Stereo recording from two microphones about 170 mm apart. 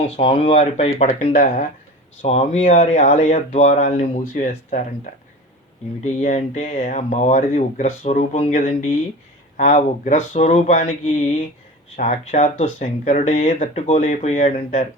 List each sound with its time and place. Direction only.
0.0 s speech: 35° left (ahead or behind)